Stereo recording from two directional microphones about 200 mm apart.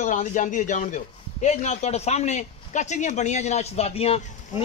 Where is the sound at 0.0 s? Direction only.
40° left (ahead or behind).